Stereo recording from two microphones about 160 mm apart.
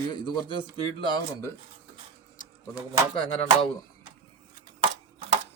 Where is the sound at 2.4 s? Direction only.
55° left (ahead or behind).